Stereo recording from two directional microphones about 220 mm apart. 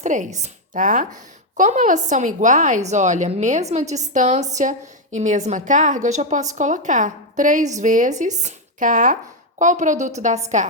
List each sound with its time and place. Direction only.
0.0 s a woman's voice: 35° right (ahead or behind)